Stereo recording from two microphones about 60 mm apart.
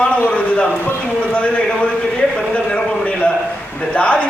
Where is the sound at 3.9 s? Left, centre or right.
Left.